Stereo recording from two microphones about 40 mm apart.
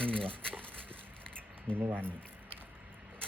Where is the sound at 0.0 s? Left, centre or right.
Left.